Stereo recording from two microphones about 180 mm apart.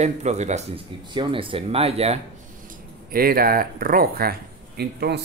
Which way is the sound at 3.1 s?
55° right (ahead or behind).